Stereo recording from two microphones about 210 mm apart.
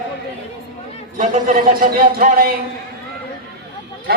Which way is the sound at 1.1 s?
35° right (ahead or behind).